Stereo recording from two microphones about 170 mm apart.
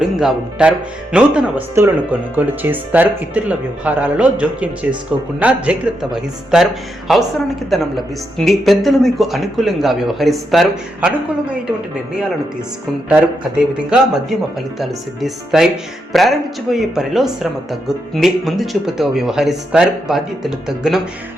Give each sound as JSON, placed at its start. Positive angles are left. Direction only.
{"t": 0.0, "sound": "speech", "side_deg": -5}
{"t": 13.7, "sound": "speech", "side_deg": -5}